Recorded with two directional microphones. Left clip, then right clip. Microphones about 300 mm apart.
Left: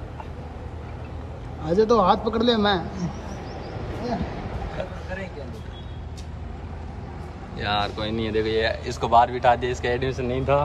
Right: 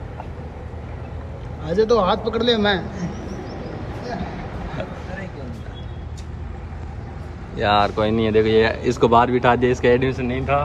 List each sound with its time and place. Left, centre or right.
1.6 s a man's voice: centre
7.5 s speech: centre